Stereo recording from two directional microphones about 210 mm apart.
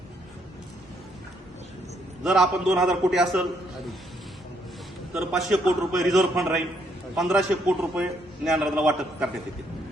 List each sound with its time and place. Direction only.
2.2 s a man's voice: centre (ahead or behind)
5.1 s a man's voice: centre (ahead or behind)